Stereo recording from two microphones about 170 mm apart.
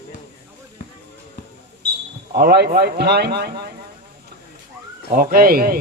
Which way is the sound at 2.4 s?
70° right (ahead or behind).